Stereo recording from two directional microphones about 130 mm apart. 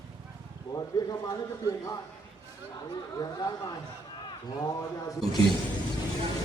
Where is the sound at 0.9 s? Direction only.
30° left (ahead or behind).